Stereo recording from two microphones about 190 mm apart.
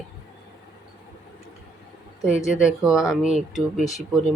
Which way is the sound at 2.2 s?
5° right (ahead or behind).